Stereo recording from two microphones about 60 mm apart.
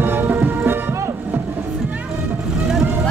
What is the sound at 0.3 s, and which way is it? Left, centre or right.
Music, right.